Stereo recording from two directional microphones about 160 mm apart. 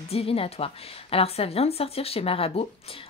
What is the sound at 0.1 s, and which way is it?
A woman's voice, 35° left (ahead or behind).